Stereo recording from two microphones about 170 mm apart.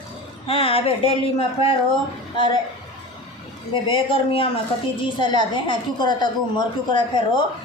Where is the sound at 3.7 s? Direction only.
30° left (ahead or behind).